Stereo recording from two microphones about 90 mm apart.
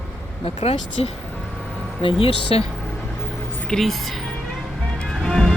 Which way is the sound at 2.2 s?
90° left.